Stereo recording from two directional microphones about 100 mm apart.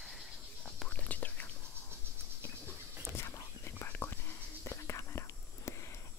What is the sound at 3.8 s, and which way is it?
Whispering, 20° left (ahead or behind).